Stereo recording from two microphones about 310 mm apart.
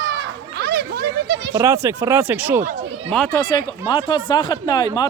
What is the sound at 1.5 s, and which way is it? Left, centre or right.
Speech, centre.